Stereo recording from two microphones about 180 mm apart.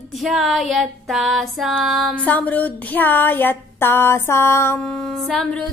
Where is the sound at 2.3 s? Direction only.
10° left (ahead or behind).